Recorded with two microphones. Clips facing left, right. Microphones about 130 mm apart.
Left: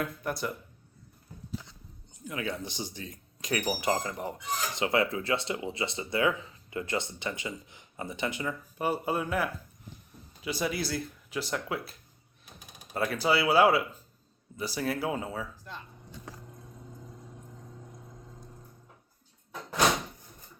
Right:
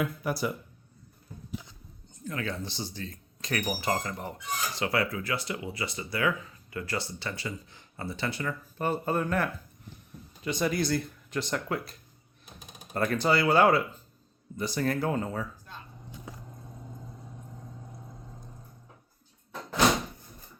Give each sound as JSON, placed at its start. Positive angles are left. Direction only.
{"t": 0.0, "sound": "speech", "side_deg": -5}
{"t": 2.2, "sound": "speech", "side_deg": 15}